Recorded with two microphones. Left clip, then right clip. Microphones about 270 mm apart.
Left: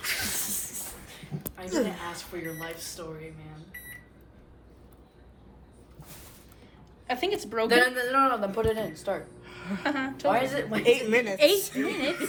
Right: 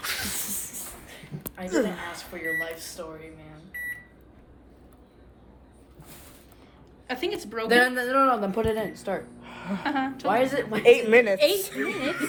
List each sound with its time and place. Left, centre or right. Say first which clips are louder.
0.0 s a sound: even; centre
1.6 s speech: right 3 dB; right
7.1 s a woman's voice: left 1 dB; centre
7.7 s speech: right 3 dB; right
9.7 s a woman's voice: right 2 dB; centre
10.3 s speech: right 3 dB; right
10.8 s a woman's voice: right 6 dB; right
11.3 s a woman's voice: left 1 dB; left